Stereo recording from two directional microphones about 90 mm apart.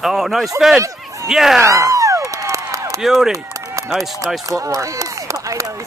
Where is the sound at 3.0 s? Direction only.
Centre (ahead or behind).